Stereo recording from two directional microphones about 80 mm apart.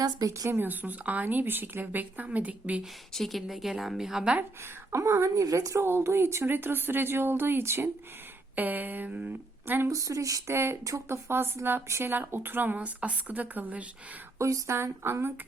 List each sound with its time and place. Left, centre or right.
0.0 s speech: right
0.5 s speech: right
3.1 s a woman's voice: centre
4.9 s a woman's voice: right
9.9 s a woman's voice: right
11.3 s speech: right
14.3 s a woman's voice: right